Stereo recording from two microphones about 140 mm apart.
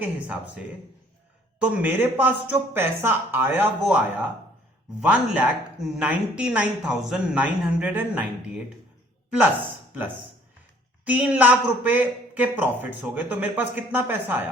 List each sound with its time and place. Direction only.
0.0 s a woman's voice: 10° right (ahead or behind)
11.0 s a woman's voice: 10° right (ahead or behind)